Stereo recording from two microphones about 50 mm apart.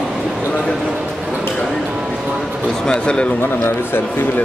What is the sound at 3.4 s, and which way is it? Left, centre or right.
Speech, left.